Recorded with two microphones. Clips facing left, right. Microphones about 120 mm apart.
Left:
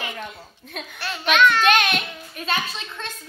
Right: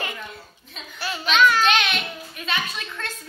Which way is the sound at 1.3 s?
Centre (ahead or behind).